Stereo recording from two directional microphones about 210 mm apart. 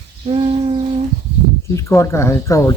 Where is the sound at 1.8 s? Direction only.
15° left (ahead or behind).